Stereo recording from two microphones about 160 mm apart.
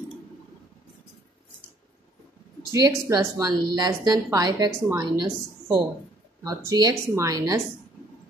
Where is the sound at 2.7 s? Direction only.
20° right (ahead or behind).